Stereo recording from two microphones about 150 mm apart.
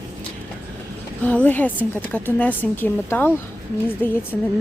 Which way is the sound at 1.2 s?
10° left (ahead or behind).